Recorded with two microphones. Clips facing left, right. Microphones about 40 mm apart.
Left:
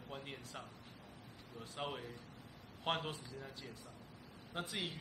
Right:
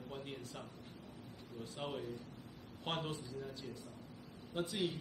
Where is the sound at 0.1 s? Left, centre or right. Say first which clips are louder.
Even; centre.